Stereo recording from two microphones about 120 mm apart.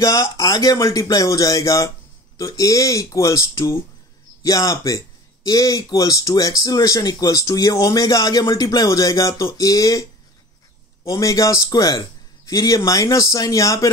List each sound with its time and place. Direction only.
0.0 s speech: 30° left (ahead or behind)
11.1 s speech: 25° left (ahead or behind)